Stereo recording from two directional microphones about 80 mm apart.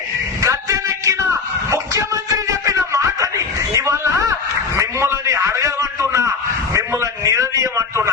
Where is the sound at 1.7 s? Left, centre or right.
Right.